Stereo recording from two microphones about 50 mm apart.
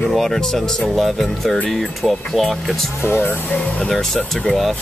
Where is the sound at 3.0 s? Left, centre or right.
Left.